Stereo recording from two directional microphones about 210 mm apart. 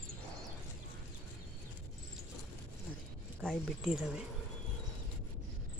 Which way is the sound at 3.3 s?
Centre (ahead or behind).